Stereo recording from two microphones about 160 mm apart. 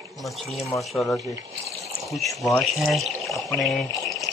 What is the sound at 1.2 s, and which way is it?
Speech, 20° right (ahead or behind).